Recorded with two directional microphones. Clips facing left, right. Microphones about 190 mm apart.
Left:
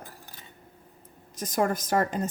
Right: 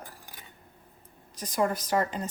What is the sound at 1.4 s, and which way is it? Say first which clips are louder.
Speech: left 2 dB; 45° left (ahead or behind).